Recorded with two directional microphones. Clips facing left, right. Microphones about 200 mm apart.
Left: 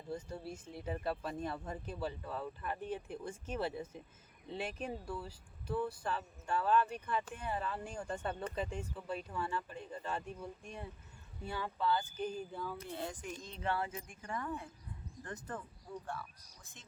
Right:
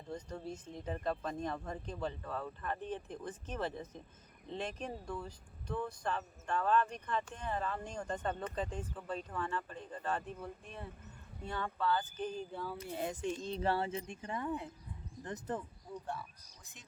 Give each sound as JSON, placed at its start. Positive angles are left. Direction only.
{"t": 0.1, "sound": "speech", "side_deg": 5}
{"t": 12.5, "sound": "speech", "side_deg": -10}
{"t": 13.2, "sound": "a woman's voice", "side_deg": -30}